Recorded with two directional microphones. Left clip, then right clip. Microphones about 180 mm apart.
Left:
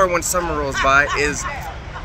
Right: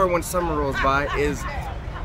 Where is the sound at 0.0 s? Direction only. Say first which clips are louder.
Left 4 dB; 15° right (ahead or behind).